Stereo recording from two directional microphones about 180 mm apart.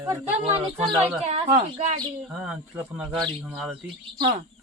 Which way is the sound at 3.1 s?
25° right (ahead or behind).